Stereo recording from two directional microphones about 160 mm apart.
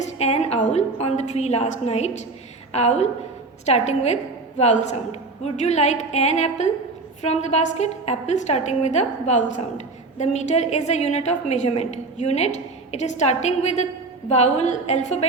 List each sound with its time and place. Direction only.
0.0 s a woman's voice: 40° left (ahead or behind)